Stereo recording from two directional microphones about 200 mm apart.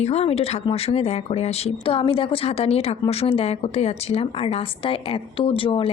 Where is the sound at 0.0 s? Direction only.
30° left (ahead or behind).